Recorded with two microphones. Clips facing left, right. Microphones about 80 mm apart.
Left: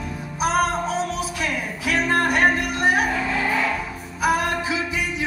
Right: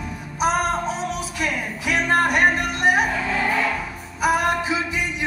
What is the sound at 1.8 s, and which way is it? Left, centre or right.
Music, centre.